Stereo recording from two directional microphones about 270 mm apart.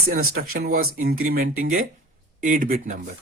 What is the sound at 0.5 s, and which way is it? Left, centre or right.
Speech, right.